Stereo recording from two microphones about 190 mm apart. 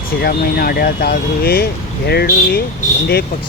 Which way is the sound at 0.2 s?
55° left (ahead or behind).